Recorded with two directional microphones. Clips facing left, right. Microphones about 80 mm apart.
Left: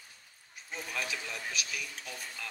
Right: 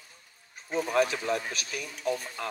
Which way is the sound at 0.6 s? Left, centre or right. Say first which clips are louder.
Right 13 dB; right.